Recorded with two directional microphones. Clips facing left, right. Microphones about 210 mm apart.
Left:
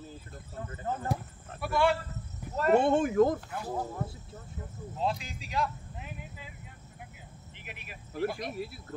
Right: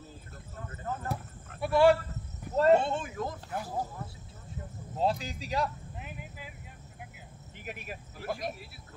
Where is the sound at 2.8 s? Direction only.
55° left (ahead or behind).